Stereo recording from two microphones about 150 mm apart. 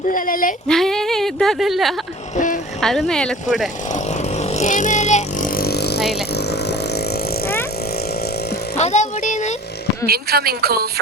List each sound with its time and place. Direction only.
0.1 s speech: 65° left (ahead or behind)
0.7 s speech: 5° left (ahead or behind)
2.3 s speech: 60° left (ahead or behind)
2.8 s speech: centre (ahead or behind)
3.9 s vehicle: 50° left (ahead or behind); by 6.1 s 90° left
6.3 s a sound: 90° left
8.7 s a sound: 50° left (ahead or behind)
10.1 s a woman's voice: 90° right